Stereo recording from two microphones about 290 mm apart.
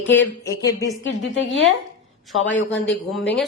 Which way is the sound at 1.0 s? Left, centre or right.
Left.